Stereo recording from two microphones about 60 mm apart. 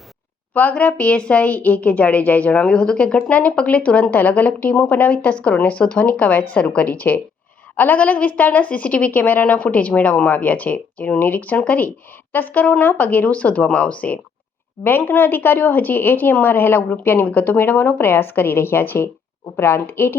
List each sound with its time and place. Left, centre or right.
0.5 s a woman's voice: left
11.9 s a woman's voice: left